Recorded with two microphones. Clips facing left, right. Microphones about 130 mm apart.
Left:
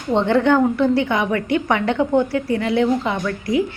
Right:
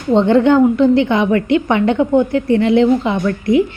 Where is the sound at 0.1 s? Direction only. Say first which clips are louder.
Right 5 dB; 15° right (ahead or behind).